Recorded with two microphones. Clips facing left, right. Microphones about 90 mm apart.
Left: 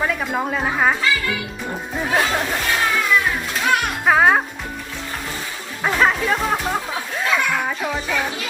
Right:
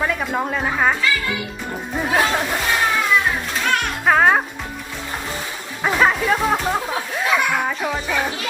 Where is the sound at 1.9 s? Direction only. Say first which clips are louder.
Right 1 dB; centre (ahead or behind).